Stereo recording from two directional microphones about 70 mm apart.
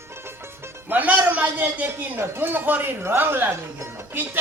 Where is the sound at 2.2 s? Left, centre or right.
Right.